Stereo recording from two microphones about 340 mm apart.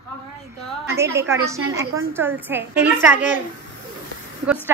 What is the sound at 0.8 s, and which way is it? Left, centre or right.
A child's voice, centre.